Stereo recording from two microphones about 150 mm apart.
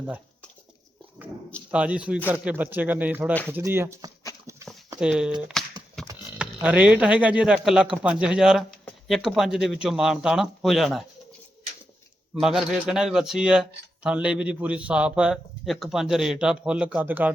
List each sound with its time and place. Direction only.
1.7 s speech: 10° right (ahead or behind)
4.4 s a sound: 20° right (ahead or behind)
4.9 s speech: 5° right (ahead or behind)
5.5 s a sound: 5° left (ahead or behind)
6.0 s livestock: 5° left (ahead or behind)
6.4 s speech: 10° right (ahead or behind)
12.3 s speech: 5° right (ahead or behind)